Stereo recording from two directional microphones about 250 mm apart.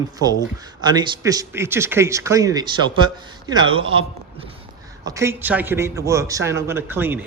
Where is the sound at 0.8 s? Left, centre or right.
Centre.